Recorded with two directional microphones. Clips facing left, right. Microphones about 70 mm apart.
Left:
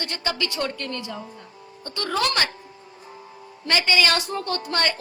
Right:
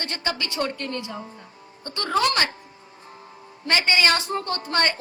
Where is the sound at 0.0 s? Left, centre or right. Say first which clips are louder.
Left 1 dB; right.